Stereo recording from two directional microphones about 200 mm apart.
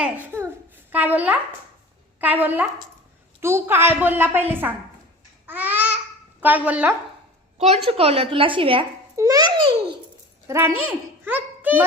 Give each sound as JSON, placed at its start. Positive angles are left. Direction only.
{"t": 0.0, "sound": "babbling", "side_deg": -10}
{"t": 0.9, "sound": "a child's voice", "side_deg": -10}
{"t": 5.5, "sound": "babbling", "side_deg": -10}
{"t": 6.4, "sound": "a woman's voice", "side_deg": -10}
{"t": 7.9, "sound": "a woman's voice", "side_deg": -30}